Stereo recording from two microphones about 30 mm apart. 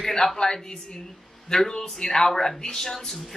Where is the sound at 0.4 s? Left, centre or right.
Left.